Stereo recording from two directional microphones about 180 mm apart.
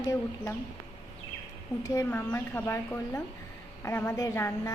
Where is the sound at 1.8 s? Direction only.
15° left (ahead or behind).